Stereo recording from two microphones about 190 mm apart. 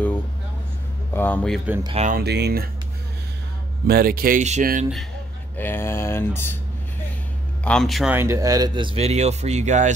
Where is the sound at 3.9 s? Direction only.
50° right (ahead or behind).